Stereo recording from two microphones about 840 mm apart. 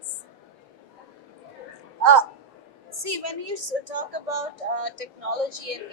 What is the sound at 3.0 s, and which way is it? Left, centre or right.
A woman's voice, right.